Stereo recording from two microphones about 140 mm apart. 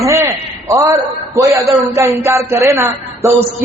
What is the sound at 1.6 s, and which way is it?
Speech, centre (ahead or behind).